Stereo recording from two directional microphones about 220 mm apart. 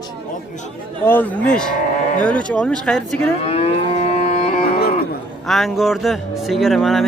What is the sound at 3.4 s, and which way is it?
Livestock, 25° left (ahead or behind).